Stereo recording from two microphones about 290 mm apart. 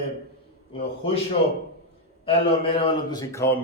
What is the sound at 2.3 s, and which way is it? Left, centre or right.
A man's voice, centre.